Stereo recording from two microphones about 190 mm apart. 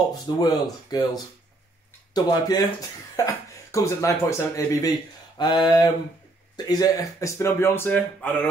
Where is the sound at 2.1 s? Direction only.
20° left (ahead or behind).